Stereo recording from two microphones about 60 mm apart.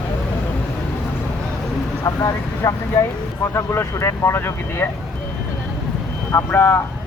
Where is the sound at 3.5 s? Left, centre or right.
Left.